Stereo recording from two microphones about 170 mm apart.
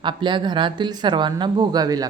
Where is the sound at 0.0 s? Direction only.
30° right (ahead or behind).